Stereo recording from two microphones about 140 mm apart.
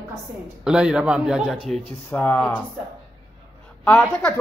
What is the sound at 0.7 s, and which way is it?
A man's voice, 5° right (ahead or behind).